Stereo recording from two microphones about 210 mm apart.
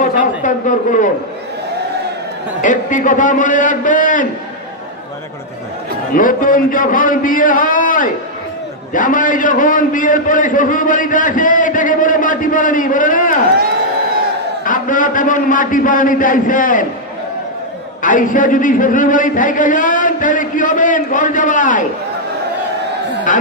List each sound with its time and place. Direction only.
0.0 s a sound: 40° left (ahead or behind)
2.6 s a man's voice: 35° left (ahead or behind)
6.1 s a man's voice: 40° left (ahead or behind)
14.6 s a man's voice: 40° left (ahead or behind)
18.0 s a man's voice: 40° left (ahead or behind)